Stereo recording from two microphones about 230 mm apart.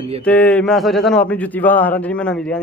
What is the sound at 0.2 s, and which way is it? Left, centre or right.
Speech, centre.